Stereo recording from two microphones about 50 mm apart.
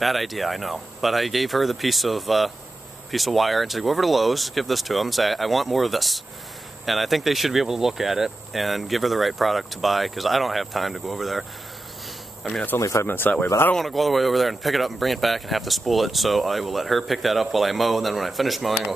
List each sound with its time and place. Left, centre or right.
0.0 s speech: centre
12.7 s speech: left
13.0 s speech: left
13.7 s speech: centre